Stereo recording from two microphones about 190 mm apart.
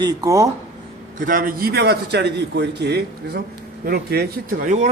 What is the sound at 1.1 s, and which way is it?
A man's voice, 45° right (ahead or behind).